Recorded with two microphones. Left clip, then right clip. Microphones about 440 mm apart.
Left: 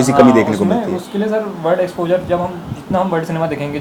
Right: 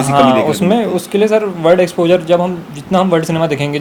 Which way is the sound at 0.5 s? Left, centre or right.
Right.